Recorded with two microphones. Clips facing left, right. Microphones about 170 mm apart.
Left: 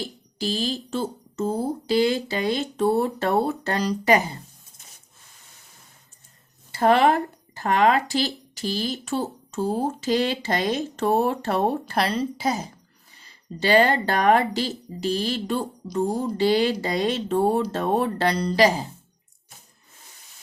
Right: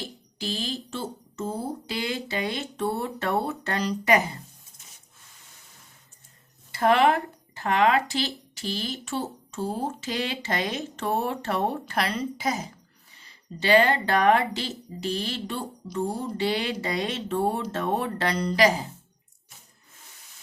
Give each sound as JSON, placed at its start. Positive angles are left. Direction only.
{"t": 0.3, "sound": "a sound", "side_deg": 35}
{"t": 1.9, "sound": "speech", "side_deg": 35}
{"t": 6.7, "sound": "speech", "side_deg": 35}